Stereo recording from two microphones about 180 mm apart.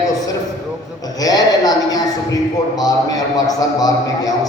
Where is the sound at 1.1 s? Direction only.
20° left (ahead or behind).